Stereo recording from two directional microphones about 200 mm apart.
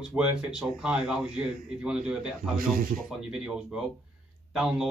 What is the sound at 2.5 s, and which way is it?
Speech, 45° right (ahead or behind).